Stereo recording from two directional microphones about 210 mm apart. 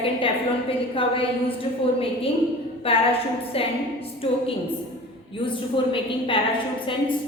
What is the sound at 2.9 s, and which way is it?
Speech, 25° left (ahead or behind).